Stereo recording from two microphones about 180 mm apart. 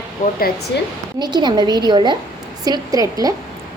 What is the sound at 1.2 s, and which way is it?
A woman's voice, 25° right (ahead or behind).